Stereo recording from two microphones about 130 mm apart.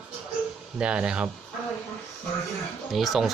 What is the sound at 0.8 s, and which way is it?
Speech, 5° right (ahead or behind).